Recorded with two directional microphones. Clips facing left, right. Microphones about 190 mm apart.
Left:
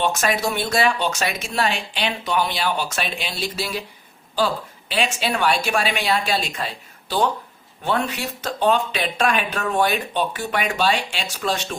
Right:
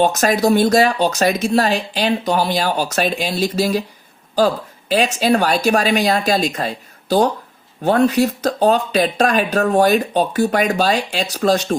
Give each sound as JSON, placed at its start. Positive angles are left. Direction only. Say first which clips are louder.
{"t": 0.0, "sound": "speech", "louder": "right 6 dB", "side_deg": -40}